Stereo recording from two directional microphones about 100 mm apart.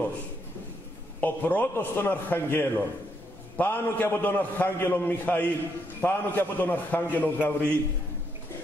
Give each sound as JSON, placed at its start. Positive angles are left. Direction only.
{"t": 1.2, "sound": "a man's voice", "side_deg": 15}